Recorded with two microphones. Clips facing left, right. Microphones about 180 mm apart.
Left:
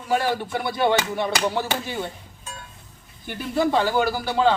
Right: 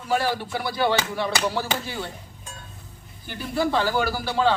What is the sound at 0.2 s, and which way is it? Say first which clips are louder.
Speech: left 2 dB; 20° left (ahead or behind).